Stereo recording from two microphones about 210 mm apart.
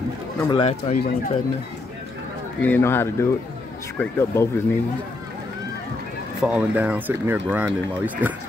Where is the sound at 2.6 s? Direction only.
10° left (ahead or behind).